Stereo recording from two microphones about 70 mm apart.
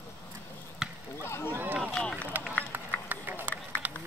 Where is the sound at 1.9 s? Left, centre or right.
Centre.